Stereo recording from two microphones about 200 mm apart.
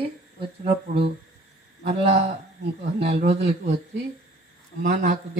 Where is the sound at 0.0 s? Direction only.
25° right (ahead or behind).